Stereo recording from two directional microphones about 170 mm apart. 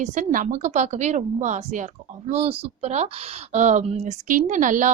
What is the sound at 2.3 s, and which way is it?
Speech, 35° right (ahead or behind).